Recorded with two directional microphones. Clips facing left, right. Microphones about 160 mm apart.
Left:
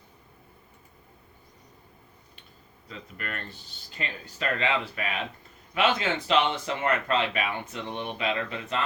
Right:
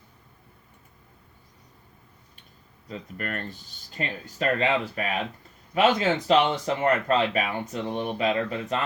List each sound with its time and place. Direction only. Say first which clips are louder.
2.9 s speech: right 5 dB; 45° right (ahead or behind)